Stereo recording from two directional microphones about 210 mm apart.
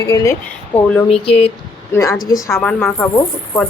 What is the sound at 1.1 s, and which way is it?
Speech, 30° left (ahead or behind).